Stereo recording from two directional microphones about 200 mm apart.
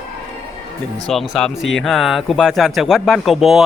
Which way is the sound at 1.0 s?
Centre (ahead or behind).